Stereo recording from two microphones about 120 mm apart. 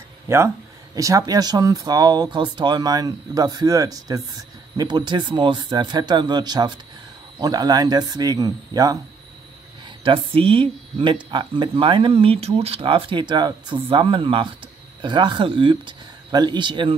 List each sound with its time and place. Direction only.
0.3 s speech: 25° right (ahead or behind)
9.8 s speech: 45° right (ahead or behind)
13.8 s speech: 50° right (ahead or behind)